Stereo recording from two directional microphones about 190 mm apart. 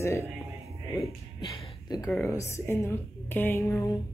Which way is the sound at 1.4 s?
20° left (ahead or behind).